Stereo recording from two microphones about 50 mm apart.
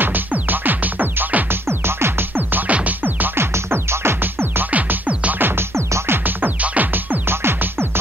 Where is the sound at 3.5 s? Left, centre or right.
Right.